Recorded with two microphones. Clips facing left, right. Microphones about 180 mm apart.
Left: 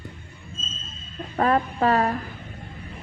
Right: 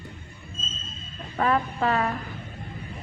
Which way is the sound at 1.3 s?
40° left (ahead or behind).